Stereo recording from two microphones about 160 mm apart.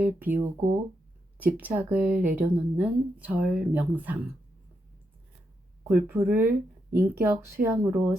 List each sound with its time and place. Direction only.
0.0 s speech: 10° right (ahead or behind)
5.9 s speech: 15° right (ahead or behind)